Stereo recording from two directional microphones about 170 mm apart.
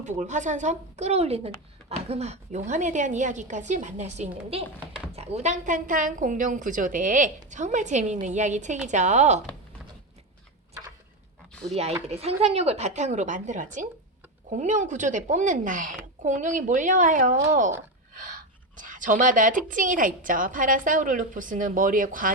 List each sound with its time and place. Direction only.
0.0 s a woman's voice: 45° right (ahead or behind)
11.7 s a woman's voice: 40° right (ahead or behind)
18.8 s a woman's voice: 50° right (ahead or behind)